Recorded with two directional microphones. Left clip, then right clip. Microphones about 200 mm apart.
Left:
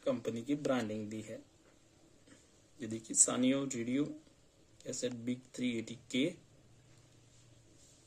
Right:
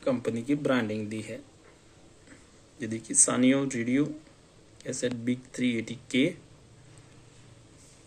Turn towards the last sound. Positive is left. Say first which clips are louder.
# right 8 dB
turn(degrees=10)  # may be behind; listen again after turning